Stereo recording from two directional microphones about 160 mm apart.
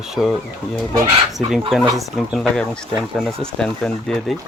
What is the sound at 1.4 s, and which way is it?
Speech, centre (ahead or behind).